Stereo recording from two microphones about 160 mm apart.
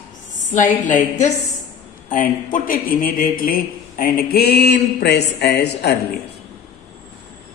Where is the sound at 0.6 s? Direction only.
55° left (ahead or behind); by 5.9 s 90° left.